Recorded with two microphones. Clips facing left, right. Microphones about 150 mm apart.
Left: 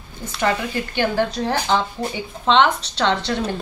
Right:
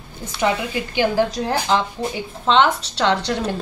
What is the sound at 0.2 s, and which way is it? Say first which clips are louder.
Speech: right 1 dB; 5° right (ahead or behind).